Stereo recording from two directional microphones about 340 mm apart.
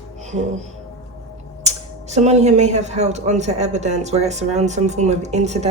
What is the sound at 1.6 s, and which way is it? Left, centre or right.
Speech, centre.